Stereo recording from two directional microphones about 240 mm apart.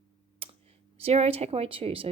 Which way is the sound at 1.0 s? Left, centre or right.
Right.